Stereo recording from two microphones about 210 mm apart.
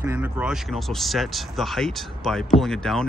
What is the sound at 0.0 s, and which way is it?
Speech, 10° right (ahead or behind).